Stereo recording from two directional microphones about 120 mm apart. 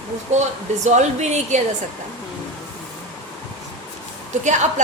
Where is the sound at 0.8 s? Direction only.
75° right (ahead or behind).